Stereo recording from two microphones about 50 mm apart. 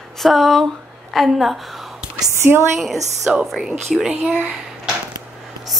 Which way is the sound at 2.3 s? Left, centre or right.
Right.